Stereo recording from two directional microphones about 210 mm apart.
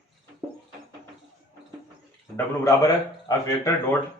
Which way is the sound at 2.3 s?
15° left (ahead or behind).